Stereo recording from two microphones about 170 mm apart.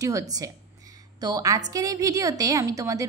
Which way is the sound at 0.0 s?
20° right (ahead or behind).